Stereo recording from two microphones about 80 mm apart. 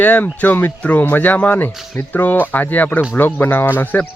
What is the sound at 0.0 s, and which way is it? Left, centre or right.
Speech, left.